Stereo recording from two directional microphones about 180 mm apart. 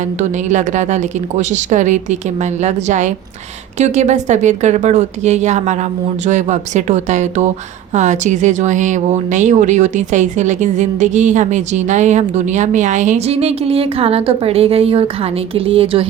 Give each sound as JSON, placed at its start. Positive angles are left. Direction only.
{"t": 0.0, "sound": "speech", "side_deg": -40}